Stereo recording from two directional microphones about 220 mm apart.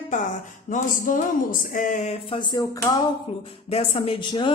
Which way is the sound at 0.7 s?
35° left (ahead or behind).